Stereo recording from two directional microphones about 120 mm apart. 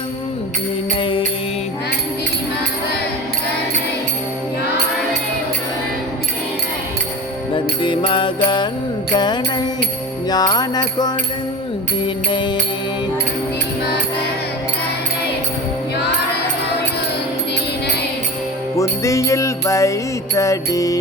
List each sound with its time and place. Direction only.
0.9 s music: 45° left (ahead or behind)
7.5 s music: 45° left (ahead or behind)
18.8 s music: 25° left (ahead or behind)